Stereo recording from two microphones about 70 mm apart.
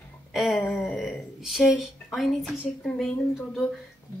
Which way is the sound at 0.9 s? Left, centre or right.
Centre.